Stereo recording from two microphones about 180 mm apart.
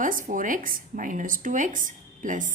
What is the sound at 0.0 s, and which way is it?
Speech, 50° right (ahead or behind).